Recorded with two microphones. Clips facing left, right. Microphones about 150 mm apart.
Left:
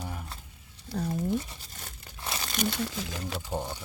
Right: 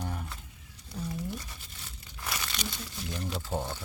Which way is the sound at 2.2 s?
25° left (ahead or behind).